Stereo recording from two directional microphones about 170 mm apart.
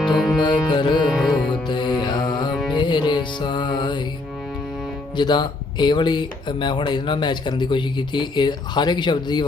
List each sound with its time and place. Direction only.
0.0 s music: centre (ahead or behind)
0.3 s speech: 30° left (ahead or behind)
1.1 s music: centre (ahead or behind)
1.6 s mantra: 25° left (ahead or behind)
2.7 s speech: 25° left (ahead or behind)
5.1 s speech: 25° left (ahead or behind)